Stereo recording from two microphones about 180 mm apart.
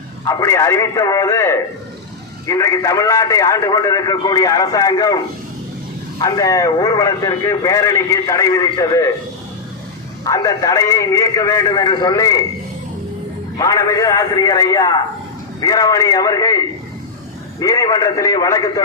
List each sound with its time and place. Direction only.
0.3 s a man's voice: 20° left (ahead or behind)
10.2 s speech: 20° left (ahead or behind)
13.6 s speech: 20° left (ahead or behind)